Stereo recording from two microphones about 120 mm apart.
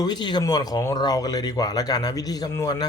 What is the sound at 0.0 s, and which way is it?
Speech, 35° left (ahead or behind).